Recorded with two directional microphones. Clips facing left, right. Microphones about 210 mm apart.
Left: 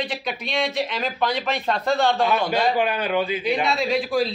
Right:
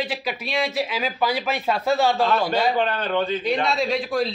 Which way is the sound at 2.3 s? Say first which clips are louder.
Even; 10° left (ahead or behind).